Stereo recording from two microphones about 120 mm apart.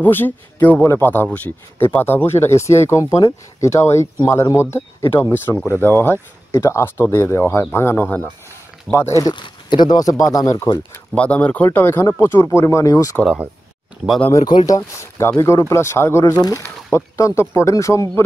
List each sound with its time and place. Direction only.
0.0 s speech: 15° left (ahead or behind)
9.2 s speech: 40° left (ahead or behind)
11.1 s speech: 10° left (ahead or behind); by 13.2 s 30° left (ahead or behind)
14.3 s speech: 35° left (ahead or behind)
15.0 s speech: 25° left (ahead or behind)
16.6 s speech: 20° left (ahead or behind)